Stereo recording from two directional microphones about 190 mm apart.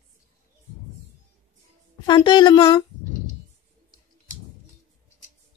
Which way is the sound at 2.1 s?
25° left (ahead or behind).